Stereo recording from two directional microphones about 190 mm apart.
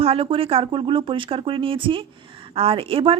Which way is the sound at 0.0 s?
30° right (ahead or behind).